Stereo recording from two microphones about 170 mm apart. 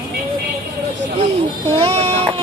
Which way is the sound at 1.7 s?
35° right (ahead or behind).